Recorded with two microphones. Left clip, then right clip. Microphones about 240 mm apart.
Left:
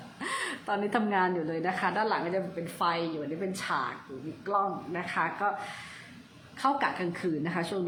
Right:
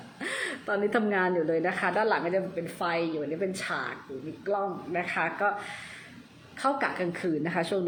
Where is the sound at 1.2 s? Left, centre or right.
Centre.